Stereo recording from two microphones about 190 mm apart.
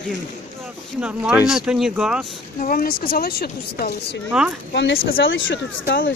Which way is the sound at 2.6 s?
50° left (ahead or behind).